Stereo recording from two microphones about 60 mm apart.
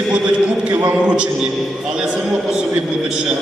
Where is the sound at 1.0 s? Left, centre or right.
Centre.